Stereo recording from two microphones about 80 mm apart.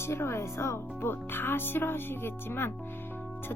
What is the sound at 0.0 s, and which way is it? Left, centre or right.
Speech, left.